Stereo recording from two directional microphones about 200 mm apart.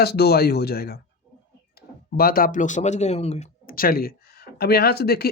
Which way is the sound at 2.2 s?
45° left (ahead or behind).